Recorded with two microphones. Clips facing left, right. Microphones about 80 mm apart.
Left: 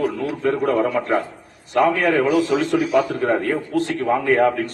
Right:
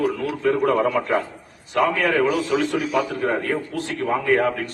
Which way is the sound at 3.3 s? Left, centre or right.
Left.